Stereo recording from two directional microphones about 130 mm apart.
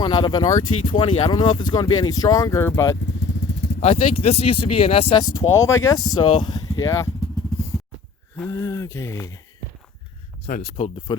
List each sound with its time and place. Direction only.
0.0 s speech: 35° left (ahead or behind)
3.8 s speech: 55° left (ahead or behind)
5.1 s speech: 30° left (ahead or behind)
5.5 s speech: 20° left (ahead or behind)
8.4 s speech: 20° left (ahead or behind)
10.4 s speech: 50° left (ahead or behind)